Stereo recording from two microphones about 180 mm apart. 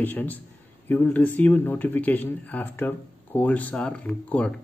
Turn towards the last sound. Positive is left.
turn(degrees=5)  # may be behind; listen again after turning